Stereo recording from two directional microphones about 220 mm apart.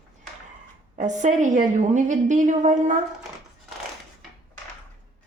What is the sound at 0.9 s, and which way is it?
A woman's voice, 35° right (ahead or behind).